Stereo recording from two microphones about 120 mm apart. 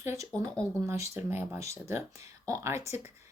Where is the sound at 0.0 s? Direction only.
20° right (ahead or behind).